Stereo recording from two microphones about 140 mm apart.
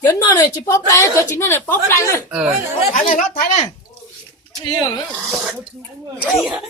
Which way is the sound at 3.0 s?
80° left.